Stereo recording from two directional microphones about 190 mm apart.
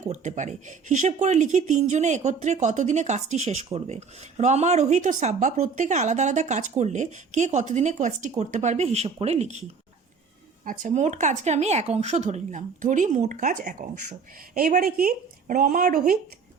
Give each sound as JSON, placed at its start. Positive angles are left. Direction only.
{"t": 0.0, "sound": "speech", "side_deg": -40}
{"t": 10.7, "sound": "speech", "side_deg": -40}